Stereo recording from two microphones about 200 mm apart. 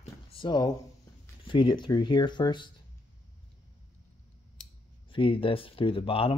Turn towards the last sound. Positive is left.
turn(degrees=30)  # may be behind; listen again after turning